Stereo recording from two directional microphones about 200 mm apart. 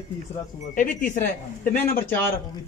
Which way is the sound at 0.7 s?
40° left (ahead or behind).